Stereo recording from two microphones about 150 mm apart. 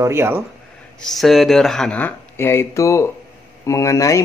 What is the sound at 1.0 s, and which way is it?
Speech, centre (ahead or behind).